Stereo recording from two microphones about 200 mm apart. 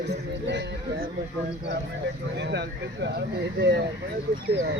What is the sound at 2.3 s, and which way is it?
Speech, 60° right (ahead or behind).